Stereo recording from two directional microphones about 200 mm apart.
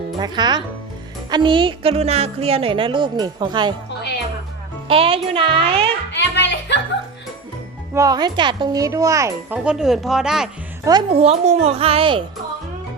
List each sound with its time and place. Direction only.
0.2 s speech: 20° right (ahead or behind)
4.9 s speech: 25° right (ahead or behind)
6.1 s music: 60° left (ahead or behind)
7.9 s speech: 20° right (ahead or behind)
9.6 s speech: 5° right (ahead or behind)
11.1 s a child's voice: 30° right (ahead or behind)